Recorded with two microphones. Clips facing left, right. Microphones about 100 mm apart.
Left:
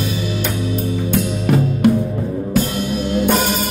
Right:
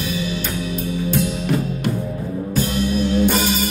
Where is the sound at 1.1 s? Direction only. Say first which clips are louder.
Left 3 dB; 55° left (ahead or behind).